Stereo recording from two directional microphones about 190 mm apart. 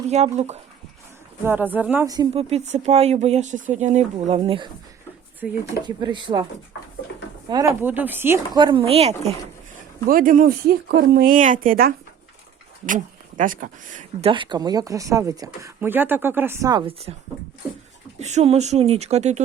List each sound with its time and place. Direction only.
0.1 s speech: 35° right (ahead or behind)
1.5 s speech: 10° right (ahead or behind)
2.3 s speech: 30° right (ahead or behind)
4.4 s speech: 25° right (ahead or behind)
5.4 s speech: 5° right (ahead or behind)
5.8 s speech: 25° right (ahead or behind)
7.5 s speech: 15° right (ahead or behind)
8.5 s speech: 25° right (ahead or behind)
10.1 s speech: 45° right (ahead or behind)
14.3 s speech: 25° right (ahead or behind)
18.2 s speech: 35° right (ahead or behind)